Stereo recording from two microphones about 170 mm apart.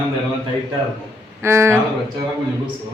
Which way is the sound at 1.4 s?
15° right (ahead or behind).